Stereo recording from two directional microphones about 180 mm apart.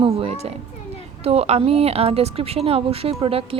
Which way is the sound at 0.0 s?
30° right (ahead or behind).